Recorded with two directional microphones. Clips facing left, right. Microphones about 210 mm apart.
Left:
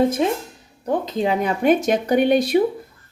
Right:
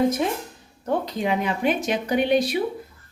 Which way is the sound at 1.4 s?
45° left (ahead or behind).